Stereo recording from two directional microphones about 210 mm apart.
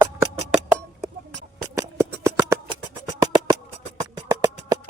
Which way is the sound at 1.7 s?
15° right (ahead or behind).